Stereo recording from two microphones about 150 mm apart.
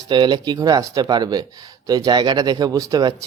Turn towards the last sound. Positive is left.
turn(degrees=-25)  # may be behind; listen again after turning